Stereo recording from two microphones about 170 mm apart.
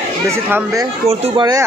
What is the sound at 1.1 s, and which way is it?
Speech, 35° right (ahead or behind).